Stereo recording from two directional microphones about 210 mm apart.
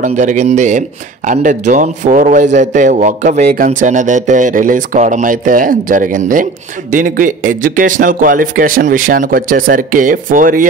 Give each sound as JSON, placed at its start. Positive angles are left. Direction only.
{"t": 0.0, "sound": "a man's voice", "side_deg": -35}